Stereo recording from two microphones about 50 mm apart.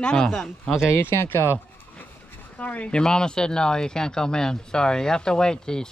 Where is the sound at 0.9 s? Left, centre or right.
Left.